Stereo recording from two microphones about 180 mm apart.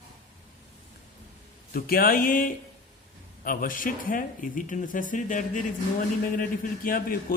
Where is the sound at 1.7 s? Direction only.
55° left (ahead or behind).